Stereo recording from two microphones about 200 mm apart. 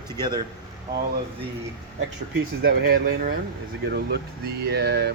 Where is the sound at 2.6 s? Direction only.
50° right (ahead or behind).